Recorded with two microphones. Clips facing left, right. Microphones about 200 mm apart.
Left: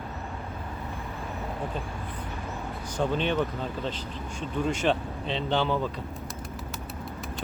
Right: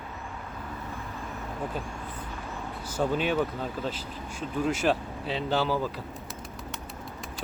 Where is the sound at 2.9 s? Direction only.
5° right (ahead or behind).